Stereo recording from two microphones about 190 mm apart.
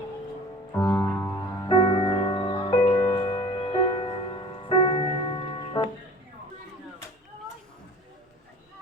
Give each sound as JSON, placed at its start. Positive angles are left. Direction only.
{"t": 0.7, "sound": "music", "side_deg": 15}
{"t": 1.7, "sound": "music", "side_deg": 25}